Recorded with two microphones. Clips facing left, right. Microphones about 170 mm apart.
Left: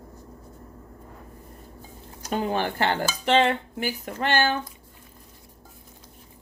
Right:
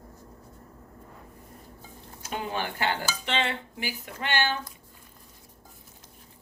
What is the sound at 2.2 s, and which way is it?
Dishes, 40° left (ahead or behind).